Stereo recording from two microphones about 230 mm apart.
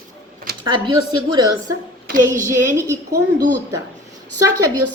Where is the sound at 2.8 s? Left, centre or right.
Centre.